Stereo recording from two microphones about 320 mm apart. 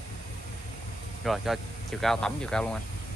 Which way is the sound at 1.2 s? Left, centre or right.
Centre.